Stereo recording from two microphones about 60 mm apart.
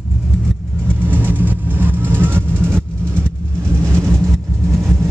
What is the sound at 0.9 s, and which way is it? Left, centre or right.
Vehicle, right.